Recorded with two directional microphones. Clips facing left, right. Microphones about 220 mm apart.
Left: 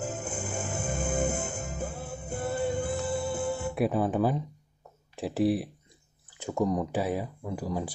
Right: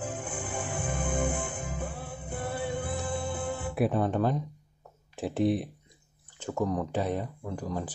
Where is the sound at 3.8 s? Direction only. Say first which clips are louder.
Even; centre (ahead or behind).